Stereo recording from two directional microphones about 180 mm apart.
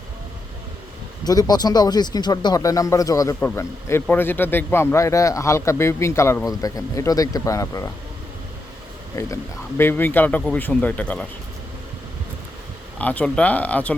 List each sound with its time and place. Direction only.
1.2 s a man's voice: 20° left (ahead or behind)
9.1 s a man's voice: 15° left (ahead or behind)
13.0 s a man's voice: 10° left (ahead or behind)